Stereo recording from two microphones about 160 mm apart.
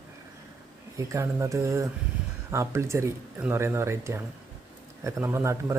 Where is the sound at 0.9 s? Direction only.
20° right (ahead or behind).